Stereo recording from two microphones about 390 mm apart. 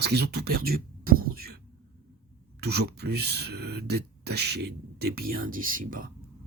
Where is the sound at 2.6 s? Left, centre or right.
Right.